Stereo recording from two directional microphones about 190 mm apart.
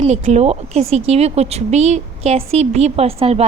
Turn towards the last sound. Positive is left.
turn(degrees=-30)  # may be behind; listen again after turning